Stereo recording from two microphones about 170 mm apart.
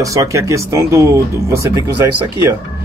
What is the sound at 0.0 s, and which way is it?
Speech, 20° right (ahead or behind).